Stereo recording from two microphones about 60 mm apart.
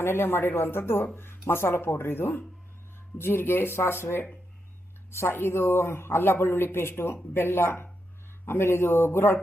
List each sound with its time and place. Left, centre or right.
0.0 s speech: left